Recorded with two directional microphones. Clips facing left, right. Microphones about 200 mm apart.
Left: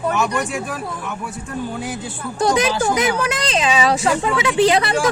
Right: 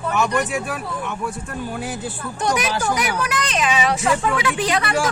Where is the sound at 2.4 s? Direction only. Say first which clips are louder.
Left 5 dB; 30° left (ahead or behind).